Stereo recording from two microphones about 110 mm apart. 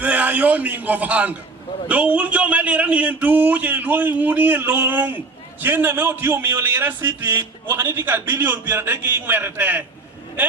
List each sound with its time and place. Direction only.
0.0 s a man's voice: 15° right (ahead or behind)